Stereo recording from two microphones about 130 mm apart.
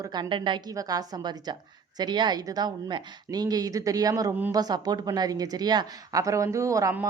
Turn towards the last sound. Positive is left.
turn(degrees=-25)  # may be behind; listen again after turning